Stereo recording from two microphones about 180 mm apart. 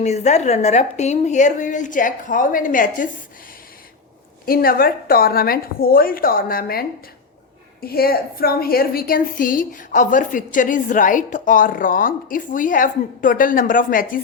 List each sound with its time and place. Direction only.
0.0 s a woman's voice: 40° left (ahead or behind)
4.4 s a woman's voice: 55° left (ahead or behind)